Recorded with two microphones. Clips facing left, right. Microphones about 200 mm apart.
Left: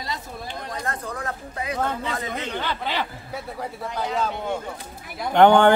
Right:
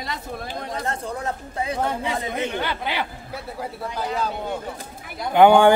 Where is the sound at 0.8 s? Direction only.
25° right (ahead or behind).